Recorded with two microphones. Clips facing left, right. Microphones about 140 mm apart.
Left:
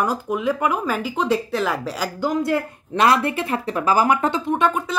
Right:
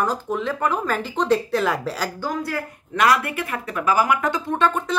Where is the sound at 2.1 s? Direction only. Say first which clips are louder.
Left 5 dB; 20° left (ahead or behind).